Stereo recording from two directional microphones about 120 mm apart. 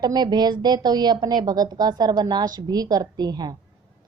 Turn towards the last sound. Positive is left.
turn(degrees=-35)  # may be behind; listen again after turning